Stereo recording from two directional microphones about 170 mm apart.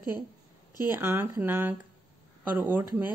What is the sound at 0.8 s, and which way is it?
A woman's voice, 15° right (ahead or behind).